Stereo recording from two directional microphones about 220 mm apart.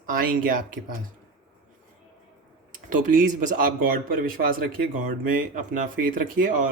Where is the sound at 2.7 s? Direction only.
35° right (ahead or behind).